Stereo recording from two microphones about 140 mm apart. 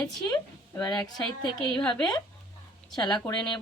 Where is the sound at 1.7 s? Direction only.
5° left (ahead or behind).